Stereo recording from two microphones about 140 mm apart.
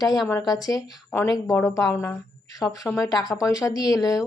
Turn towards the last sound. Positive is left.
turn(degrees=25)  # may be behind; listen again after turning